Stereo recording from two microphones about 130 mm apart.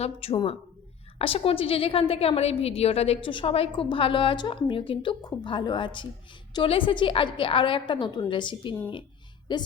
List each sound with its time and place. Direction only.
0.0 s a woman's voice: 50° left (ahead or behind)